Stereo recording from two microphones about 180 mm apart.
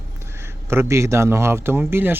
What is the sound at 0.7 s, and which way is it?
Speech, 15° right (ahead or behind).